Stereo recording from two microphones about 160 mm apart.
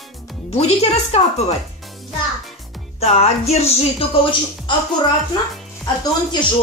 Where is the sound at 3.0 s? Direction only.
40° left (ahead or behind).